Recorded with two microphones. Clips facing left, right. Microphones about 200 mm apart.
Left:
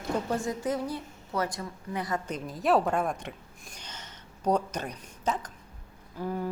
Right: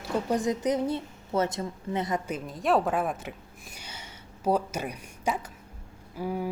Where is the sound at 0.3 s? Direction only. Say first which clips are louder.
Right 4 dB; 20° right (ahead or behind).